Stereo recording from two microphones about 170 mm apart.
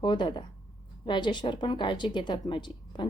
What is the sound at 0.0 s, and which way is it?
A woman's voice, 30° left (ahead or behind).